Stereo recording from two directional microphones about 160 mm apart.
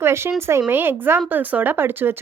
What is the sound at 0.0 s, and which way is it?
A woman's voice, 15° right (ahead or behind).